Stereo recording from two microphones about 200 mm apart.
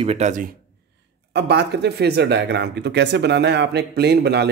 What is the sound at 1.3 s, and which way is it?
Speech, 55° right (ahead or behind).